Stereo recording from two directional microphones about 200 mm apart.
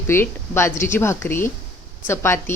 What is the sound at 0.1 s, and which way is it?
A woman's voice, 10° left (ahead or behind).